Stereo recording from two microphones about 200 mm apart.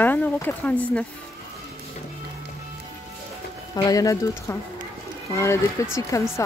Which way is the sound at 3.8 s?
15° left (ahead or behind).